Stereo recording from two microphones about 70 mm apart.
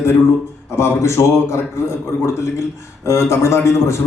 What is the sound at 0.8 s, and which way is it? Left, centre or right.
A man's voice, left.